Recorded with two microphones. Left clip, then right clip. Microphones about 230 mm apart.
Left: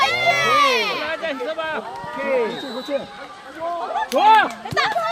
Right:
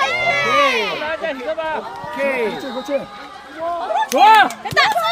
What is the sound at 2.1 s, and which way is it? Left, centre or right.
Speech, right.